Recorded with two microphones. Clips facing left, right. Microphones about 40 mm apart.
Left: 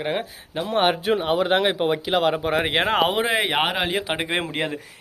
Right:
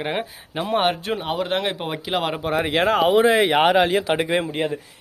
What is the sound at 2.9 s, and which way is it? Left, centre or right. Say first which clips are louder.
Speech: right 4 dB; left.